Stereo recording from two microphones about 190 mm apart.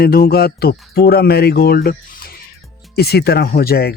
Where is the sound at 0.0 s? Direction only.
55° left (ahead or behind).